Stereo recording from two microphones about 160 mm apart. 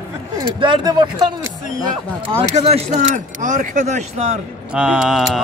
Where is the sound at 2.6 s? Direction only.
40° right (ahead or behind).